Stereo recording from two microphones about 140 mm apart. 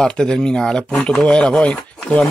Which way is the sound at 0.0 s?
5° left (ahead or behind).